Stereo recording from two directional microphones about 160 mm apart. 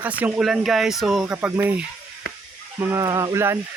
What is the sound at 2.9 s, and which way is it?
Speech, 20° right (ahead or behind).